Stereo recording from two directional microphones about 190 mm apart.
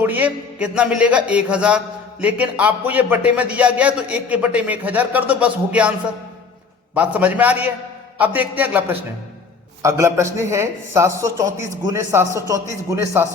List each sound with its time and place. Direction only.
0.0 s speech: 10° right (ahead or behind)
6.9 s speech: 5° right (ahead or behind)